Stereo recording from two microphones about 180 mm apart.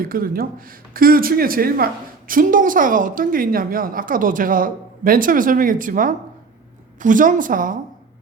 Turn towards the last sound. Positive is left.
turn(degrees=-50)  # may be behind; listen again after turning